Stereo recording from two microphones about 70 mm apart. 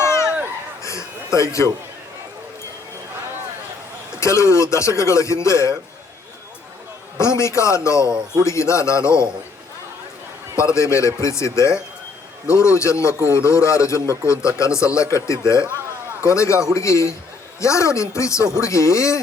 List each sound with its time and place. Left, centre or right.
0.0 s a sound: left
4.2 s speech: left
7.2 s speech: left
10.8 s speech: left